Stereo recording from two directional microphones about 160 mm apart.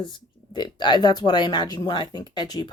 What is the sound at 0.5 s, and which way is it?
Speech, 30° left (ahead or behind).